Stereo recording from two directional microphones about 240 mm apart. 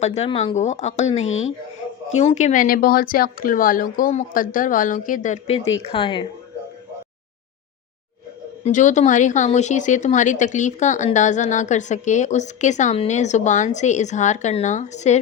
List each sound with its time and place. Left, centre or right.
0.0 s speech: left
8.6 s speech: left